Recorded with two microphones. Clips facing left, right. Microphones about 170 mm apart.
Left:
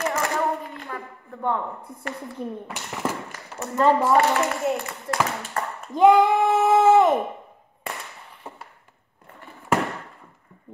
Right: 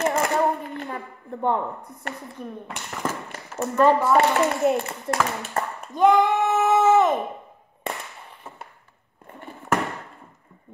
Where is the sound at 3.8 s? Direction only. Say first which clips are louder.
Right 1 dB; 25° left (ahead or behind).